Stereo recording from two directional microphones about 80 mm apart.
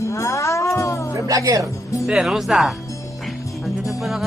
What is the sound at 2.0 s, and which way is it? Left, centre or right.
Speech, centre.